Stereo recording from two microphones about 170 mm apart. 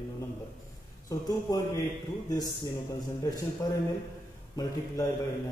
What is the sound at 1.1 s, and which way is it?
Speech, 20° left (ahead or behind).